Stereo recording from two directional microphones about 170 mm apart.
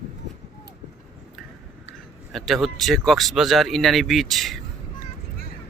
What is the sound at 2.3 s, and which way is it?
Speech, centre (ahead or behind).